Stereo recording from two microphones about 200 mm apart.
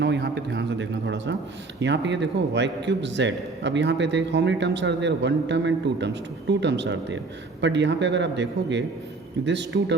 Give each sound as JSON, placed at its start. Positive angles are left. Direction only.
{"t": 0.0, "sound": "a man's voice", "side_deg": -60}